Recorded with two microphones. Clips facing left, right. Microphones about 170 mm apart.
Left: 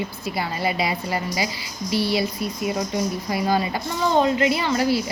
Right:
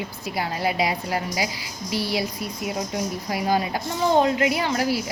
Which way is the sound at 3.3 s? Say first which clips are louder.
Even; 10° right (ahead or behind).